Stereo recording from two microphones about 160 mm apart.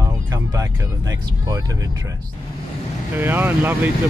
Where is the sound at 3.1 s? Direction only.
15° right (ahead or behind).